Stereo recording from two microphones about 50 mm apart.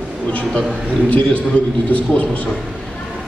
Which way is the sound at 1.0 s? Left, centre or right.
Left.